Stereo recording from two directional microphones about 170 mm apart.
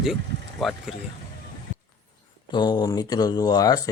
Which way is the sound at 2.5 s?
25° left (ahead or behind).